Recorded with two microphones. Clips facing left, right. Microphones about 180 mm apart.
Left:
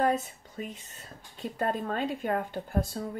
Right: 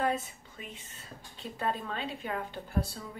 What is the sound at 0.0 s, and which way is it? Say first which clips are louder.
Speech: left 4 dB; 40° left (ahead or behind).